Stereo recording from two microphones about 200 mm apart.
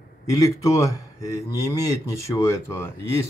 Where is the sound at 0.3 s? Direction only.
15° left (ahead or behind).